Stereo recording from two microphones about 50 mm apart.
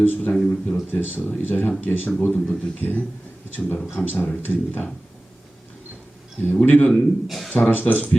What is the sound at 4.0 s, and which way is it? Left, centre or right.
Speech, centre.